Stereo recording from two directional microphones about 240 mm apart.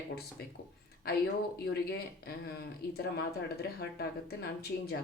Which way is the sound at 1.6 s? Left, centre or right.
Left.